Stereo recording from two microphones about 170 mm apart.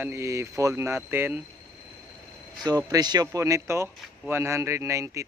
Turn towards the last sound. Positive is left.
turn(degrees=-15)  # may be behind; listen again after turning